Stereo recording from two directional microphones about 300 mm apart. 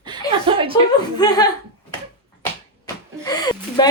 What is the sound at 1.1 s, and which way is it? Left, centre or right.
Speech, centre.